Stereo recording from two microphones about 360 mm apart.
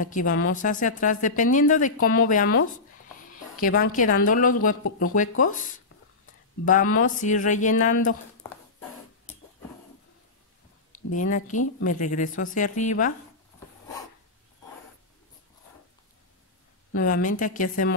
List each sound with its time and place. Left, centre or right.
0.0 s a woman's voice: left
3.6 s a woman's voice: left
11.1 s a woman's voice: left
16.9 s a woman's voice: left